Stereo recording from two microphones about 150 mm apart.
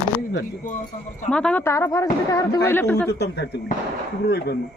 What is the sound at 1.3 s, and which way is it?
Speech, 5° left (ahead or behind).